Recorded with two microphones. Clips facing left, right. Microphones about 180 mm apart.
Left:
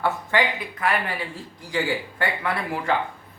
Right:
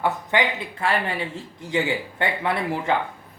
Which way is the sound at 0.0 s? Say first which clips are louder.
Even; 20° right (ahead or behind).